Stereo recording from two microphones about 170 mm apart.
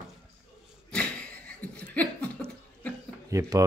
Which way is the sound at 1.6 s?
10° left (ahead or behind).